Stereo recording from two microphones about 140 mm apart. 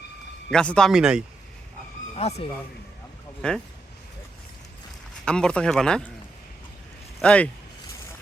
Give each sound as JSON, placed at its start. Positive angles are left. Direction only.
{"t": 0.5, "sound": "speech", "side_deg": 5}
{"t": 2.1, "sound": "speech", "side_deg": 50}
{"t": 3.4, "sound": "speech", "side_deg": 5}
{"t": 5.2, "sound": "speech", "side_deg": 5}
{"t": 7.2, "sound": "speech", "side_deg": 10}